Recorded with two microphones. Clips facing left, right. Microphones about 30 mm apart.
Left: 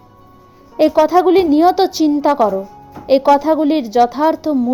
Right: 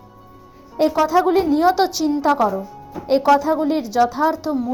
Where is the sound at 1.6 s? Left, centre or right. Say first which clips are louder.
Left 5 dB; left.